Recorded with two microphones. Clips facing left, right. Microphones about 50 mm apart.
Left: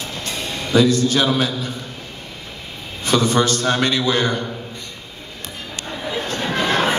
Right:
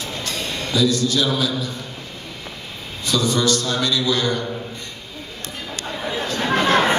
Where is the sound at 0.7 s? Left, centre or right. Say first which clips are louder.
Left 4 dB; left.